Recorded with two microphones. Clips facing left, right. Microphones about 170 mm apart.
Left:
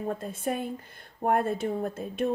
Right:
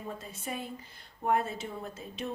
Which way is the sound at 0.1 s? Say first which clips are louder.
Left 7 dB; 50° left (ahead or behind).